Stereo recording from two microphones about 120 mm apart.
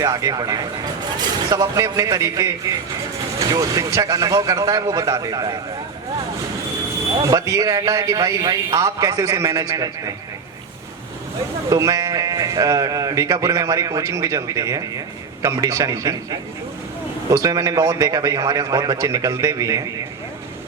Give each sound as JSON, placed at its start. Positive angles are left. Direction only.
{"t": 0.0, "sound": "speech", "side_deg": -30}
{"t": 7.3, "sound": "speech", "side_deg": -30}
{"t": 11.7, "sound": "speech", "side_deg": -30}